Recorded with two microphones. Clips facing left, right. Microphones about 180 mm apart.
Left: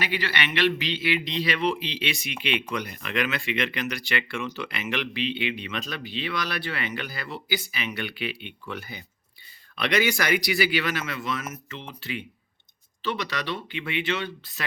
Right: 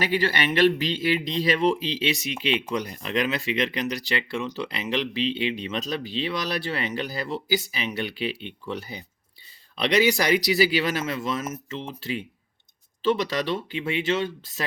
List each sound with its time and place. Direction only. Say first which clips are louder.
0.0 s speech: right 5 dB; 45° right (ahead or behind)